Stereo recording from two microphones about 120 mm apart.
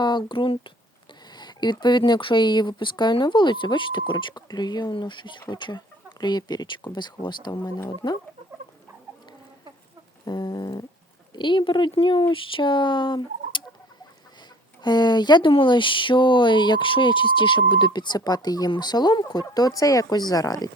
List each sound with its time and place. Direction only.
0.0 s speech: 40° left (ahead or behind)
10.2 s speech: 35° left (ahead or behind)
14.8 s speech: 35° left (ahead or behind)